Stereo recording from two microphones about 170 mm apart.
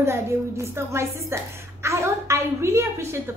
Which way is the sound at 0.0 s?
15° right (ahead or behind).